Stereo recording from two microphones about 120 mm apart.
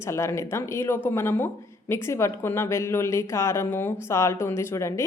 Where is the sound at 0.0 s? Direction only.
25° left (ahead or behind).